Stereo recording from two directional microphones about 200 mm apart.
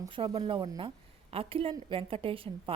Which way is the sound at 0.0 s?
20° right (ahead or behind).